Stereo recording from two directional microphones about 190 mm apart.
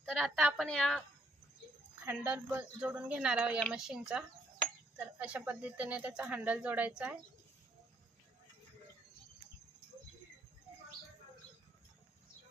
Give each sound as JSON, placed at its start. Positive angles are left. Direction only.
{"t": 0.0, "sound": "a woman's voice", "side_deg": 0}
{"t": 2.0, "sound": "a woman's voice", "side_deg": -10}